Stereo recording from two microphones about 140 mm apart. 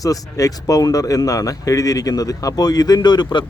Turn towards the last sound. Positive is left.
turn(degrees=30)  # may be behind; listen again after turning